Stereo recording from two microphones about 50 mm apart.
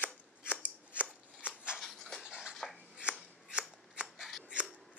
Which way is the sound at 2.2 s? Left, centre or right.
Centre.